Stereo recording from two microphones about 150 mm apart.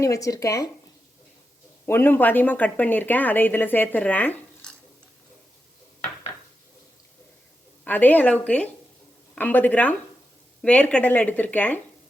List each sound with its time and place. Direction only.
0.0 s speech: 20° left (ahead or behind)
1.9 s speech: 15° left (ahead or behind)
7.9 s speech: 10° left (ahead or behind)